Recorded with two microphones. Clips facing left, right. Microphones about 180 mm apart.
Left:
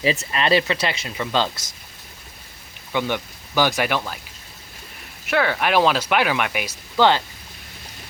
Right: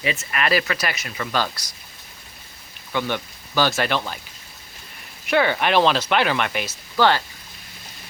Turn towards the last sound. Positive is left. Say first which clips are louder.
# left 1 dB
turn(degrees=20)  # may be behind; listen again after turning